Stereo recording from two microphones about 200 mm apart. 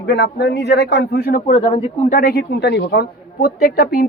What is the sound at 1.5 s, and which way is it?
Speech, 30° left (ahead or behind).